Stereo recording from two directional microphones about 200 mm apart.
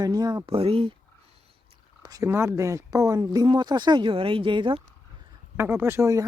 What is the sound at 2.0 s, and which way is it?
Speech, 20° right (ahead or behind).